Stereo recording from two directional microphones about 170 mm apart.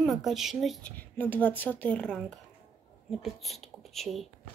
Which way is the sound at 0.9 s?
10° left (ahead or behind).